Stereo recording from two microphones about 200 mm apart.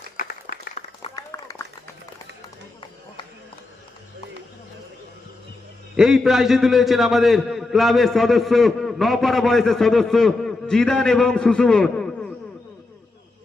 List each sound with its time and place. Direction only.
0.2 s clapping: 45° left (ahead or behind)
1.1 s run: 15° left (ahead or behind)
6.0 s a man's voice: centre (ahead or behind)